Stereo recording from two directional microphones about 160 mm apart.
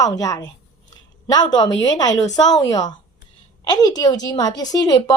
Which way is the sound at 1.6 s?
25° left (ahead or behind).